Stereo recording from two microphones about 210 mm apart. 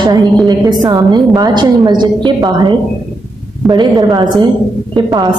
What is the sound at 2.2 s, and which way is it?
A woman's voice, 20° right (ahead or behind).